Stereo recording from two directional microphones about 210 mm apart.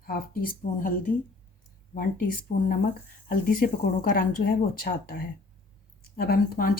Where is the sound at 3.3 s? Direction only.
45° left (ahead or behind).